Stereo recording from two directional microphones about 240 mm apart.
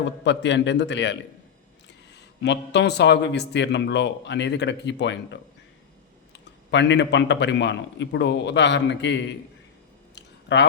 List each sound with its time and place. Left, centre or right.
0.0 s speech: left
6.7 s speech: left
10.2 s a sound: left